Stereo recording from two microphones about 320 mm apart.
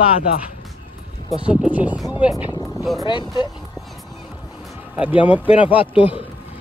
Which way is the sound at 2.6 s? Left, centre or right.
Centre.